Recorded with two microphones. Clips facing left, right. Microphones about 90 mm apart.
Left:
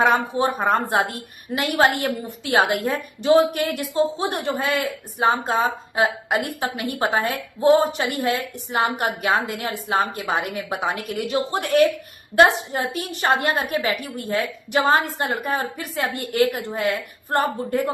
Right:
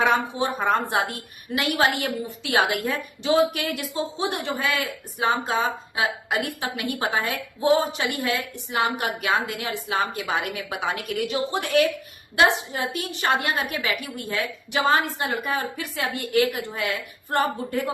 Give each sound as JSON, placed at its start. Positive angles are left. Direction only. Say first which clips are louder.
{"t": 0.1, "sound": "a woman's voice", "louder": "left 3 dB", "side_deg": 45}